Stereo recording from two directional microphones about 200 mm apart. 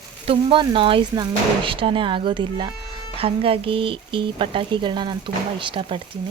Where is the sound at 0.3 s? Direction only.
25° right (ahead or behind).